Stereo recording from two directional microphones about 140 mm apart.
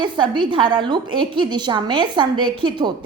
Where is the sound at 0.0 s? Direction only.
35° right (ahead or behind).